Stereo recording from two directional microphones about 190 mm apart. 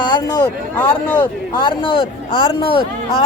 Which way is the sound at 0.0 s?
20° left (ahead or behind).